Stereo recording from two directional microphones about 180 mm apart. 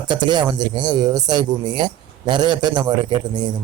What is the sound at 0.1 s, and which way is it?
Speech, 25° right (ahead or behind).